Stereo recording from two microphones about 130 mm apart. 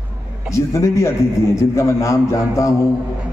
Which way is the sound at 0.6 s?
20° left (ahead or behind).